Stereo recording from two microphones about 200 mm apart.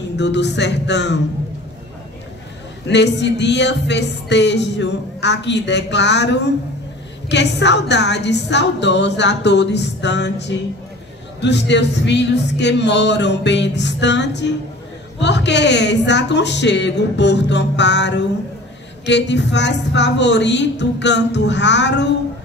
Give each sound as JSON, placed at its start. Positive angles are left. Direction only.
{"t": 0.2, "sound": "speech", "side_deg": 60}
{"t": 2.9, "sound": "speech", "side_deg": 60}